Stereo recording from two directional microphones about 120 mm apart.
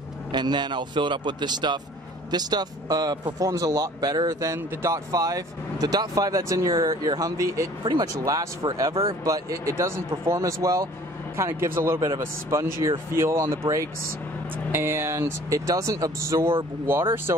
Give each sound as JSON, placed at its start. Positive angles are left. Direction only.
{"t": 0.3, "sound": "speech", "side_deg": -40}
{"t": 7.8, "sound": "speech", "side_deg": -45}
{"t": 8.1, "sound": "speech", "side_deg": -30}
{"t": 13.6, "sound": "speech", "side_deg": -50}
{"t": 14.7, "sound": "speech", "side_deg": -20}